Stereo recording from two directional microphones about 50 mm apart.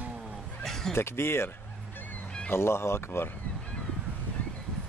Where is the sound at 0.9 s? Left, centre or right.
Left.